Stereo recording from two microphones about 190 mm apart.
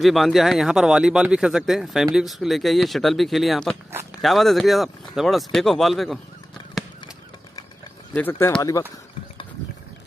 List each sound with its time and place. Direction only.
0.0 s speech: centre (ahead or behind)
6.8 s a sound: centre (ahead or behind)
8.1 s speech: 10° left (ahead or behind)